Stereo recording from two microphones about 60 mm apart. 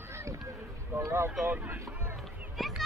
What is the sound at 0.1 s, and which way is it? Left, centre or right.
Run, right.